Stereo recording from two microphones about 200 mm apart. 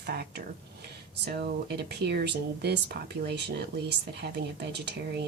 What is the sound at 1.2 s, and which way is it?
Speech, 50° right (ahead or behind).